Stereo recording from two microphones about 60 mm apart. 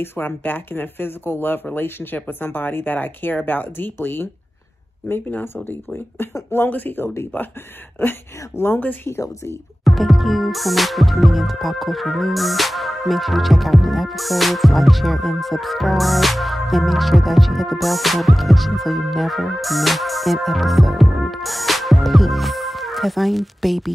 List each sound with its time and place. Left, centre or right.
0.0 s speech: left
6.7 s speech: left
9.8 s music: centre